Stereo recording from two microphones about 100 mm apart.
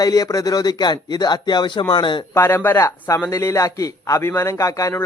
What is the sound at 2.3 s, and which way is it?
A man's voice, 25° left (ahead or behind).